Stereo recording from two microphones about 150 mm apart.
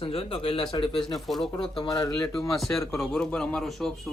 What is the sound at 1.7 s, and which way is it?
Speech, 30° left (ahead or behind).